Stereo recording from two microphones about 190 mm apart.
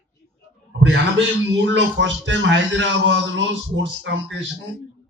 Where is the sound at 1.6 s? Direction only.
75° right (ahead or behind).